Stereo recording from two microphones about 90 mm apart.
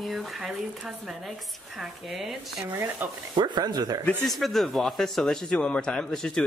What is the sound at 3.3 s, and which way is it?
Speech, 55° right (ahead or behind).